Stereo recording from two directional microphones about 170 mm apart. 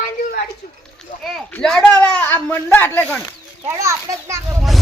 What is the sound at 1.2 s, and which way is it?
Speech, centre (ahead or behind).